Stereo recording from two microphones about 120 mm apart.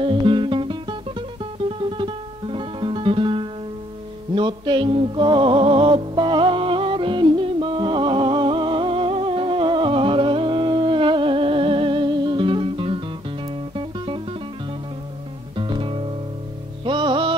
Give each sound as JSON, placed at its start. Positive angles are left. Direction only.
{"t": 0.0, "sound": "music", "side_deg": -45}
{"t": 15.5, "sound": "music", "side_deg": -45}